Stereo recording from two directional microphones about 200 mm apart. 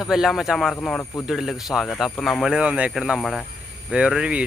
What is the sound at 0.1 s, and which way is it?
Speech, centre (ahead or behind).